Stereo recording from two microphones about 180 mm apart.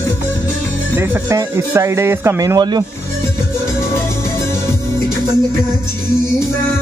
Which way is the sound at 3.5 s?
15° left (ahead or behind).